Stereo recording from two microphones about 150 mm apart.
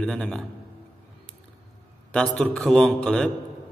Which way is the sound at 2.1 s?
5° left (ahead or behind).